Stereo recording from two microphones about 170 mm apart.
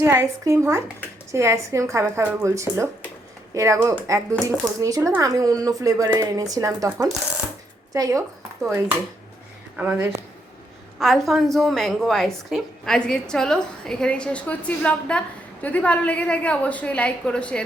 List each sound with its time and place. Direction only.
0.0 s a woman's voice: 15° right (ahead or behind)
9.7 s a woman's voice: 10° right (ahead or behind)
11.0 s a woman's voice: centre (ahead or behind)